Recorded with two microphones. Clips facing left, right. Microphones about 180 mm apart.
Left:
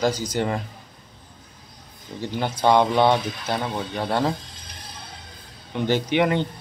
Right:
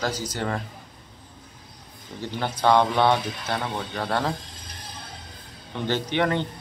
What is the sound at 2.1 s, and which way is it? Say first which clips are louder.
A man's voice: left 3 dB; 15° left (ahead or behind).